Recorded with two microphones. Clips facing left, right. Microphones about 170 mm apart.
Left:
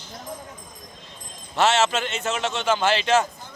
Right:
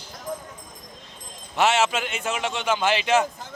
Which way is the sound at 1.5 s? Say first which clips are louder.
Left 1 dB; 15° right (ahead or behind).